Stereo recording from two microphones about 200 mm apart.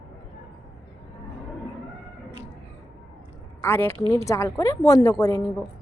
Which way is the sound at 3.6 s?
10° left (ahead or behind).